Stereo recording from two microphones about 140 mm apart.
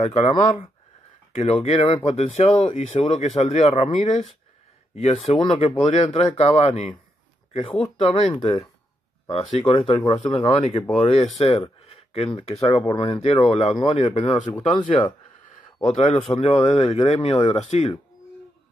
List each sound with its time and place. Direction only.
0.0 s speech: 55° left (ahead or behind)
1.3 s speech: 45° left (ahead or behind)
5.1 s speech: 40° left (ahead or behind)
5.9 s speech: 50° left (ahead or behind)
8.0 s speech: 50° left (ahead or behind)
8.3 s speech: 35° left (ahead or behind)
9.6 s speech: 40° left (ahead or behind)
10.8 s speech: centre (ahead or behind)
11.3 s a sound: 45° left (ahead or behind)
12.3 s speech: 40° left (ahead or behind)